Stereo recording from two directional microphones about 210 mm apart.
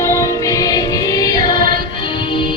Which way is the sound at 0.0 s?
15° left (ahead or behind).